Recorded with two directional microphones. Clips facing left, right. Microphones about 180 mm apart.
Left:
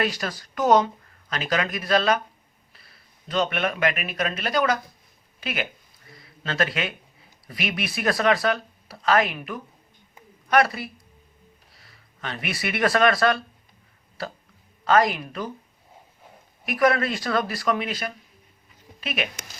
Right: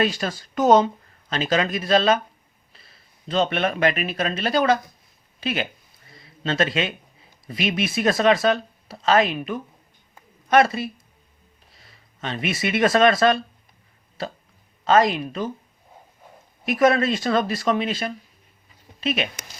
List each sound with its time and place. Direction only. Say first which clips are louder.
0.0 s speech: right 3 dB; 25° right (ahead or behind)
6.1 s a sound: right 6 dB; 25° right (ahead or behind)
7.4 s speech: right 5 dB; 25° right (ahead or behind)
16.6 s speech: right 3 dB; 25° right (ahead or behind)